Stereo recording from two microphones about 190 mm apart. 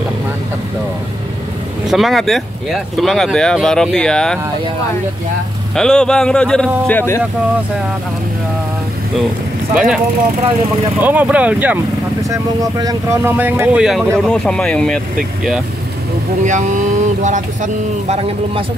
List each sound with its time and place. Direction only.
1.9 s speech: centre (ahead or behind)
5.8 s speech: 5° left (ahead or behind)
11.0 s speech: 10° right (ahead or behind)
16.4 s speech: 40° right (ahead or behind)